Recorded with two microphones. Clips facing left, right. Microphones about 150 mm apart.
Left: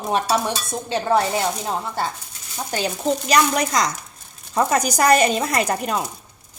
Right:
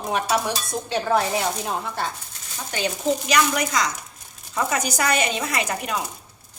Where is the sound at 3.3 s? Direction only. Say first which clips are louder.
Left 6 dB; 35° left (ahead or behind).